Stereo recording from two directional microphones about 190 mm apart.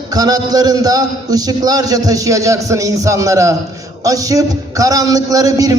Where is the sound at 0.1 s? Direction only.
20° right (ahead or behind).